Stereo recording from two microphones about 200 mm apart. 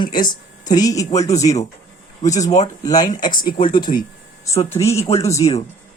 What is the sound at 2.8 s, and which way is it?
Speech, 20° left (ahead or behind).